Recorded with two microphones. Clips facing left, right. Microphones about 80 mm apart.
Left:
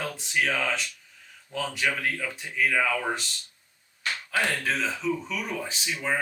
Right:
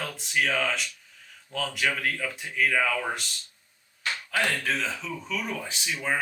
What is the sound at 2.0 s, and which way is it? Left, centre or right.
Speech, centre.